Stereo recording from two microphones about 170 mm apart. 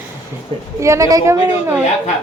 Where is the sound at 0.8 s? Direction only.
20° right (ahead or behind).